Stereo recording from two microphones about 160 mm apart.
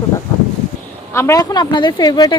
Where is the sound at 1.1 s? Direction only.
20° left (ahead or behind).